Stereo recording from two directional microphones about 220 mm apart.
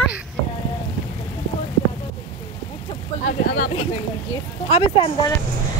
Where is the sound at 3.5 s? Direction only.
30° left (ahead or behind).